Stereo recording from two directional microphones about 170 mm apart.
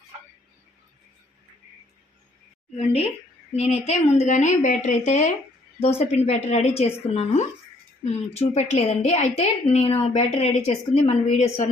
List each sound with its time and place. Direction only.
3.5 s a woman's voice: 40° left (ahead or behind)